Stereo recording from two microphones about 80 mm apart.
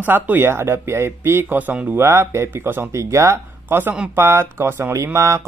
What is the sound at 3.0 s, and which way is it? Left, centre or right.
Speech, right.